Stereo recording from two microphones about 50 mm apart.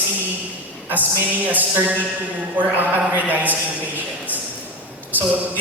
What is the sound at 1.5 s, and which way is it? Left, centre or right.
A man's voice, right.